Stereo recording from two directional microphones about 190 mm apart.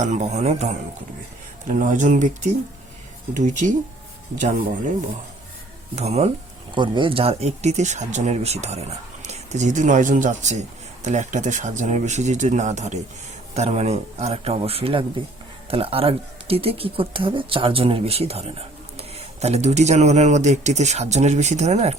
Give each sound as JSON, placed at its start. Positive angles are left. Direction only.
{"t": 0.0, "sound": "speech", "side_deg": -40}
{"t": 6.0, "sound": "speech", "side_deg": -35}